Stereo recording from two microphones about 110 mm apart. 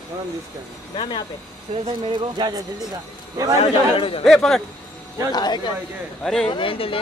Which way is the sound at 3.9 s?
55° left (ahead or behind).